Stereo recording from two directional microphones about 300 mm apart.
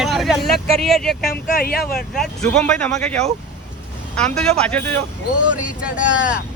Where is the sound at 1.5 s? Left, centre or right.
Left.